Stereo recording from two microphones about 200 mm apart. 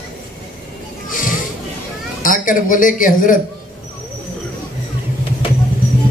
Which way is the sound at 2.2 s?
40° left (ahead or behind).